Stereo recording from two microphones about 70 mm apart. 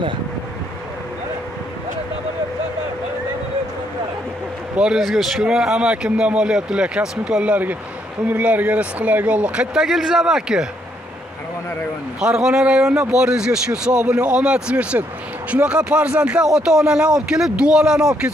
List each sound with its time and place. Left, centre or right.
4.7 s speech: centre
5.0 s speech: centre
8.3 s speech: right
9.8 s speech: centre
12.2 s speech: centre